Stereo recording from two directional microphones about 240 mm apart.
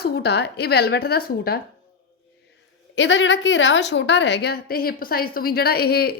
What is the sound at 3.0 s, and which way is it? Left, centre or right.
A woman's voice, left.